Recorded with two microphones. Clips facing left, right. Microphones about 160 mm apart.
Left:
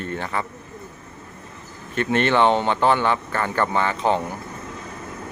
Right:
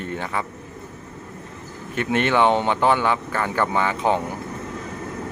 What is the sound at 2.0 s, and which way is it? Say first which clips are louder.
Speech: left 1 dB; 10° right (ahead or behind).